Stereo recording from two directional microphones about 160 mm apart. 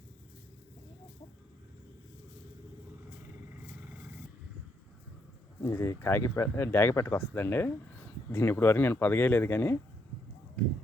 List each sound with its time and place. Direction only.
5.6 s speech: 15° left (ahead or behind)